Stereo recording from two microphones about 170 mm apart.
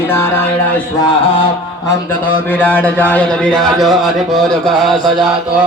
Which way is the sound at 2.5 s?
10° left (ahead or behind).